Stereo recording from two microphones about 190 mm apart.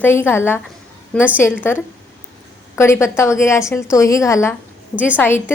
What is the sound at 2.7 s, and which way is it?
A woman's voice, 15° left (ahead or behind).